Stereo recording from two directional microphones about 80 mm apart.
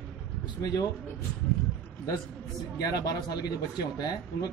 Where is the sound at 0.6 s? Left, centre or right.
Left.